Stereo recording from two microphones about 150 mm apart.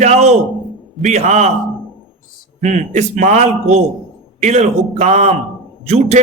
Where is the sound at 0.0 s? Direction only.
50° right (ahead or behind).